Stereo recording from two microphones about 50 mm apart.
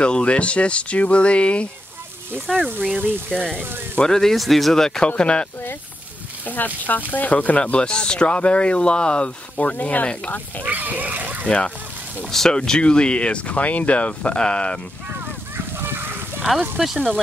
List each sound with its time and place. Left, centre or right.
0.0 s speech: left
2.5 s speech: centre
6.4 s speech: left
10.6 s splash: right
11.4 s speech: left
12.3 s speech: centre
15.5 s a sound: right